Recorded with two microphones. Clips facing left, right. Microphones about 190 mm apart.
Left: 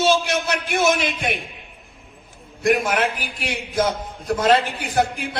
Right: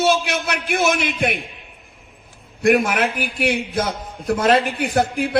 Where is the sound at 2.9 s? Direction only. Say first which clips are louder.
Right 2 dB; 60° right (ahead or behind).